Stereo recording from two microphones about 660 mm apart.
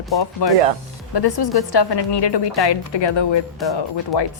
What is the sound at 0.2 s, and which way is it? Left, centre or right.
A woman's voice, left.